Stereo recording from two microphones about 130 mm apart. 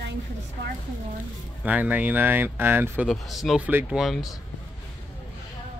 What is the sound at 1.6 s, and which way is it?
Speech, 10° right (ahead or behind).